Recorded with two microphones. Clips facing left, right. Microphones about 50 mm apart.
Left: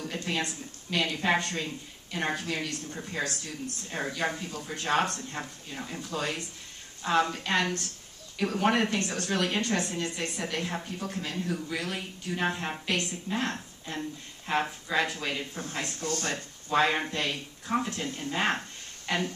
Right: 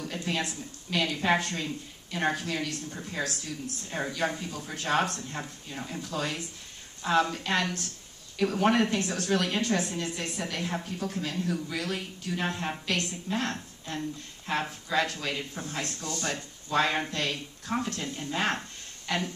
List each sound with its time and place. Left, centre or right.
0.3 s a woman's voice: centre
13.4 s speech: centre
16.0 s speech: left
16.7 s speech: centre